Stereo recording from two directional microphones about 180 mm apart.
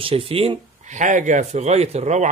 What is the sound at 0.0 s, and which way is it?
Speech, 30° right (ahead or behind).